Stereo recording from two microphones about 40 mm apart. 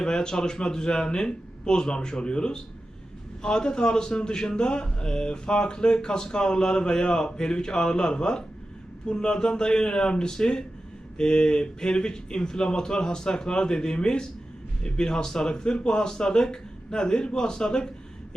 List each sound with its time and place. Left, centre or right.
0.0 s a man's voice: centre